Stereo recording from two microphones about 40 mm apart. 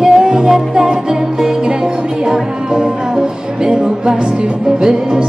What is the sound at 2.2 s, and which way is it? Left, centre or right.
Music, centre.